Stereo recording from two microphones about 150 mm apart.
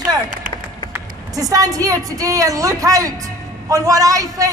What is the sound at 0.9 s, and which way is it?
A woman's voice, 25° right (ahead or behind).